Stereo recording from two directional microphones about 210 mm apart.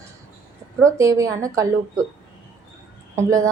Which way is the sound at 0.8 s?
15° right (ahead or behind).